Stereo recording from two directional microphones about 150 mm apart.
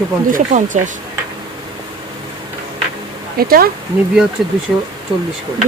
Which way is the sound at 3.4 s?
80° right.